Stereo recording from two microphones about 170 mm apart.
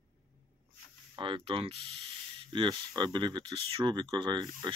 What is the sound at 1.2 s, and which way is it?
Speech, 30° right (ahead or behind).